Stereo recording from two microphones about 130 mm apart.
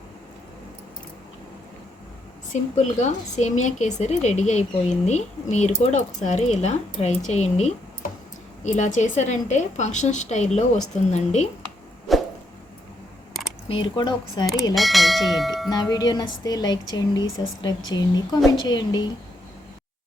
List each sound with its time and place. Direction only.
2.5 s speech: 65° left (ahead or behind)
8.6 s speech: 65° left (ahead or behind)
12.1 s a sound: centre (ahead or behind)
13.7 s speech: 40° left (ahead or behind)
14.8 s speech: centre (ahead or behind)
15.7 s speech: 30° left (ahead or behind)